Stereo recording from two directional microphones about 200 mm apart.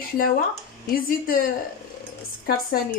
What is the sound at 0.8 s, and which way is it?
Speech, 45° left (ahead or behind).